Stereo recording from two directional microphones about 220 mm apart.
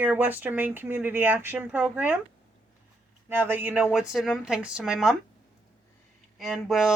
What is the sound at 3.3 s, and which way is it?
Speech, 10° right (ahead or behind).